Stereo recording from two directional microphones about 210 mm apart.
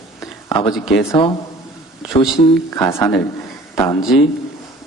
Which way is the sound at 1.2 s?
25° left (ahead or behind).